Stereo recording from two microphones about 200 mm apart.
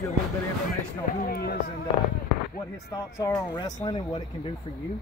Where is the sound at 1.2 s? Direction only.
50° left (ahead or behind).